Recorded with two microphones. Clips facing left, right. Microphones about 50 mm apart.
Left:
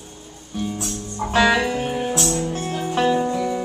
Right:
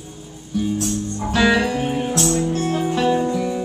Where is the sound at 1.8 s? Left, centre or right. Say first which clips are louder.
Right 2 dB; centre.